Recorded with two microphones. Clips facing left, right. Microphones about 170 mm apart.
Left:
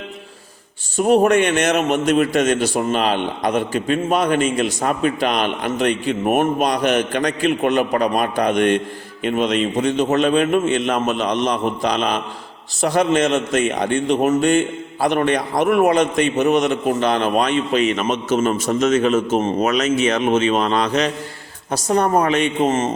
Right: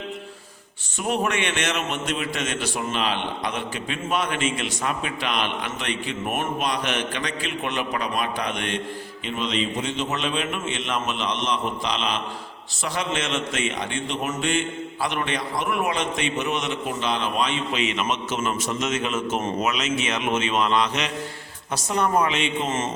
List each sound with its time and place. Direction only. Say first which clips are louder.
0.9 s a man's voice: left 11 dB; 40° left (ahead or behind)